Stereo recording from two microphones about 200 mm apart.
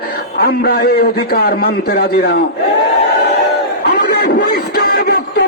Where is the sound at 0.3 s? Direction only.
55° left (ahead or behind).